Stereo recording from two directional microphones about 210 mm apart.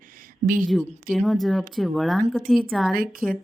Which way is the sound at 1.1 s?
Centre (ahead or behind).